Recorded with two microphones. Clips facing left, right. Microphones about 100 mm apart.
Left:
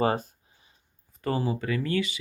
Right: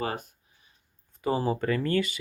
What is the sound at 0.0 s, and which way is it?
Speech, 30° left (ahead or behind).